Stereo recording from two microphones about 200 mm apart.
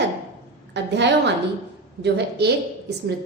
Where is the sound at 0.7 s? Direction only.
60° right (ahead or behind).